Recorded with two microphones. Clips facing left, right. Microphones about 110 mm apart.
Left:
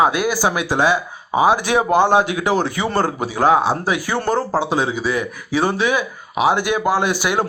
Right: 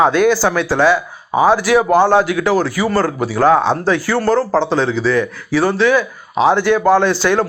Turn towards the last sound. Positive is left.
turn(degrees=15)  # may be behind; listen again after turning